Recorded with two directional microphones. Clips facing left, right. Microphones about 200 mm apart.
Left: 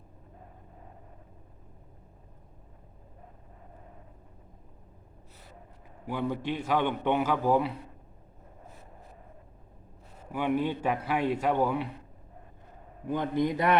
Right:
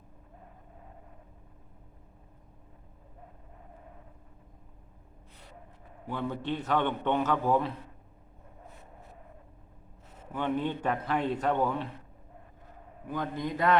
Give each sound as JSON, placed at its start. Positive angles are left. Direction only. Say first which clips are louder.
{"t": 6.1, "sound": "a man's voice", "louder": "left 2 dB", "side_deg": 10}
{"t": 10.3, "sound": "a man's voice", "louder": "left 2 dB", "side_deg": 10}
{"t": 13.1, "sound": "a man's voice", "louder": "left 5 dB", "side_deg": 20}